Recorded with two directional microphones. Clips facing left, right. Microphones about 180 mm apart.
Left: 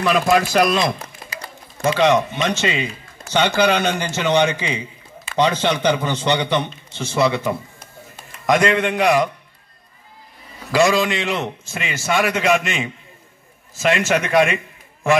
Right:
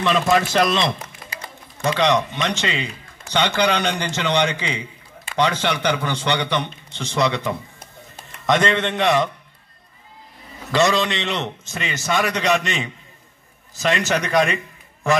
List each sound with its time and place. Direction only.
0.0 s a man's voice: 5° left (ahead or behind)
1.2 s a sound: 25° left (ahead or behind)
1.8 s a man's voice: 15° left (ahead or behind)
6.9 s speech: 15° right (ahead or behind)
7.2 s a man's voice: 10° left (ahead or behind)
10.7 s a man's voice: 5° left (ahead or behind)